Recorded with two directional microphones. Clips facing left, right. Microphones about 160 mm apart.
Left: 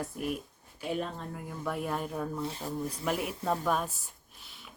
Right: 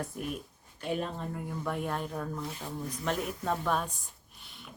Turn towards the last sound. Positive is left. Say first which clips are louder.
# right 2 dB
turn(degrees=0)  # may be behind; listen again after turning